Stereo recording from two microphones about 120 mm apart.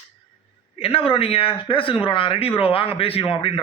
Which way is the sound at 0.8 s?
50° left (ahead or behind).